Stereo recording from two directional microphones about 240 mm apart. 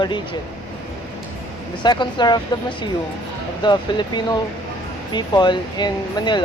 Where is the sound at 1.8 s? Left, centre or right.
Centre.